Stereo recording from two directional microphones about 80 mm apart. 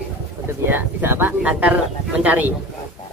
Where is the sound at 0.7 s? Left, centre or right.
Right.